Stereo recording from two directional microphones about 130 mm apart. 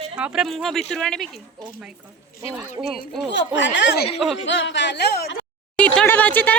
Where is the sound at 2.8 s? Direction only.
15° right (ahead or behind).